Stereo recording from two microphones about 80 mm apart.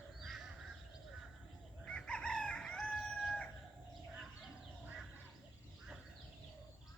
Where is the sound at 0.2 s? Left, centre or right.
Centre.